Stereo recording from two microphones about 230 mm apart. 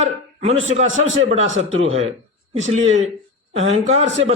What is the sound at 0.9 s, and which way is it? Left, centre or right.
Speech, right.